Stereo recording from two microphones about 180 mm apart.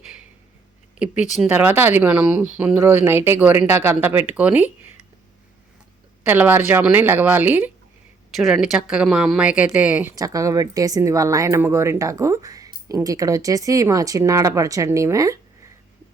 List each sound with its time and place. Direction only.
0.9 s speech: 5° right (ahead or behind)
6.2 s speech: 10° right (ahead or behind)
10.2 s speech: 20° right (ahead or behind)